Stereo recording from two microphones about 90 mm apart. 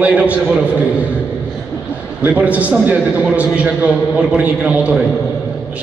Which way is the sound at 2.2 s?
15° right (ahead or behind).